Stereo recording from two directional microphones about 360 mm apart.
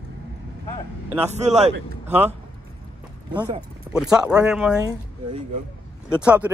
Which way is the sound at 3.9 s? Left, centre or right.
Centre.